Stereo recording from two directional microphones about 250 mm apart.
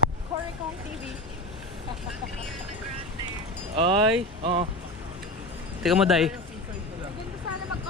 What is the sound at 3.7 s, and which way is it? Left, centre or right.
Speech, right.